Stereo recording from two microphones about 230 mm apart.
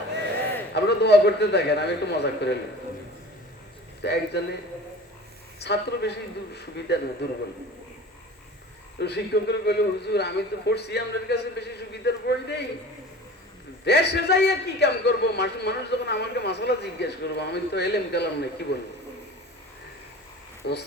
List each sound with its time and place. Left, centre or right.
0.7 s a man's voice: left
4.0 s a man's voice: left
5.5 s a man's voice: left
9.0 s a man's voice: left
13.8 s a man's voice: left
20.6 s a man's voice: left